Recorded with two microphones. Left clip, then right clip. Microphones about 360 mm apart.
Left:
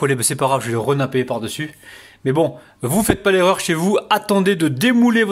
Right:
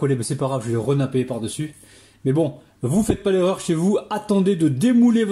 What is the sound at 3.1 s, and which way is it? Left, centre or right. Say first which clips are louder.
Speech: left 5 dB; left.